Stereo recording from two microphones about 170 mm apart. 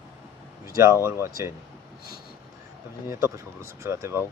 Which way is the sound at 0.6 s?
20° right (ahead or behind).